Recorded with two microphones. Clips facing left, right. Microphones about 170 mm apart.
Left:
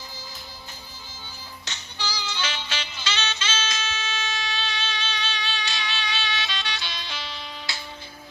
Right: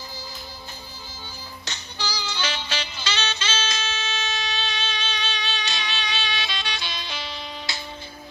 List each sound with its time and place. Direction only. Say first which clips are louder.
1.6 s music: right 1 dB; 40° right (ahead or behind); by 7.8 s 15° right (ahead or behind)